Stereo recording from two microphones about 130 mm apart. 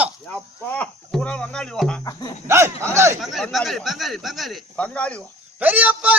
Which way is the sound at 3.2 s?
Centre (ahead or behind).